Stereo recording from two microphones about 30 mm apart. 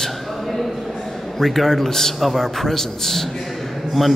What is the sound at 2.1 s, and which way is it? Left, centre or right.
A man's voice, centre.